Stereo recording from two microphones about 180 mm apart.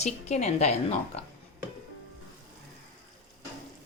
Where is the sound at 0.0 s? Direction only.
40° left (ahead or behind).